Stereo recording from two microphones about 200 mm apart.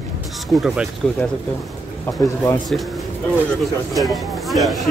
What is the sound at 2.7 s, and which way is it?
Speech, centre (ahead or behind).